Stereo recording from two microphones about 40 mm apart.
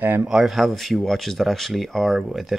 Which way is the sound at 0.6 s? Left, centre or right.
Centre.